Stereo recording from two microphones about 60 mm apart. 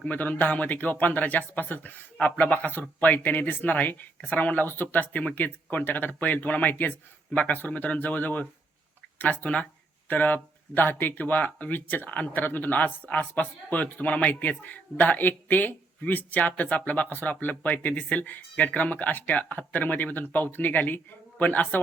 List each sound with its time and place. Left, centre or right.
0.0 s speech: left